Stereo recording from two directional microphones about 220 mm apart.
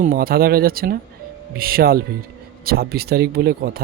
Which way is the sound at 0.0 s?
40° right (ahead or behind).